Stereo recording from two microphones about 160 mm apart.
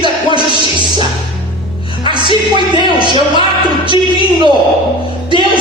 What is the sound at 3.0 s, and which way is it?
Music, 30° right (ahead or behind).